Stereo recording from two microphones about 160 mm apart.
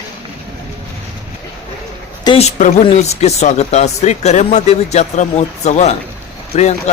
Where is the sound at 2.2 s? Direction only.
35° left (ahead or behind).